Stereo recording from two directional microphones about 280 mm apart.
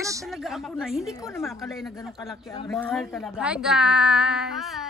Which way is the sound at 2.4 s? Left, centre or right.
Centre.